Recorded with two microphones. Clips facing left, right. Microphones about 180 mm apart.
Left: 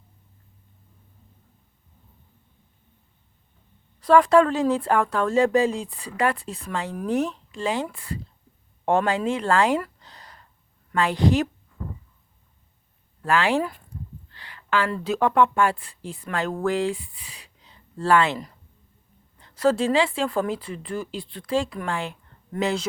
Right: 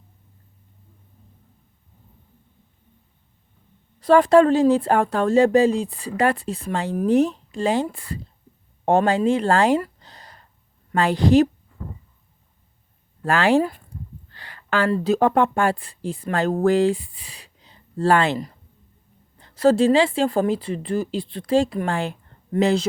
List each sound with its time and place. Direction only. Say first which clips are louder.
4.0 s speech: right 3 dB; 30° right (ahead or behind)
13.2 s speech: right 4 dB; 40° right (ahead or behind)